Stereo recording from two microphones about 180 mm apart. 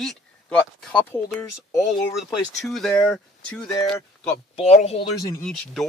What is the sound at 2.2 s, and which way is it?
Speech, centre (ahead or behind).